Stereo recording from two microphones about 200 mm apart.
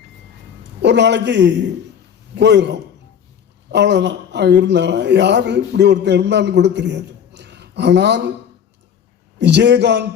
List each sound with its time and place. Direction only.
0.8 s speech: 60° right (ahead or behind)
9.4 s speech: 60° right (ahead or behind)